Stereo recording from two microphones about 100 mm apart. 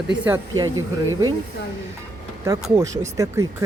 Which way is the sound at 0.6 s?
40° right (ahead or behind).